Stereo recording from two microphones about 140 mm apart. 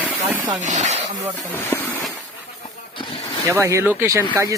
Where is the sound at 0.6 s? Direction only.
55° right (ahead or behind).